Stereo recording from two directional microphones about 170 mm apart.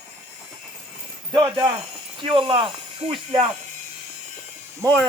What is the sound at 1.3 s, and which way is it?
Speech, 25° right (ahead or behind).